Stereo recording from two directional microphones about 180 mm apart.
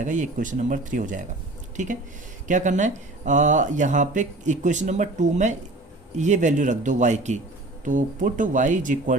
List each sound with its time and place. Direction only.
0.0 s speech: 45° right (ahead or behind)